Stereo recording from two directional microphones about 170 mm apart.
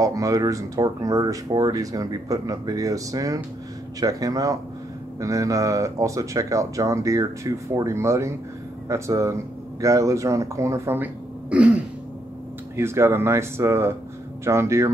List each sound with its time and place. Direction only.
0.0 s speech: 20° right (ahead or behind)